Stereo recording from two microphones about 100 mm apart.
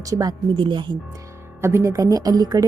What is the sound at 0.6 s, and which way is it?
Speech, 50° right (ahead or behind).